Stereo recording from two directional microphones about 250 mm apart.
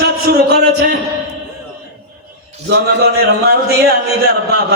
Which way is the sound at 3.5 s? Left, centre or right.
Right.